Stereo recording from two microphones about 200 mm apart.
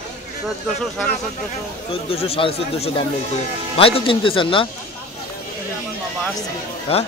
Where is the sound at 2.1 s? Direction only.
30° left (ahead or behind).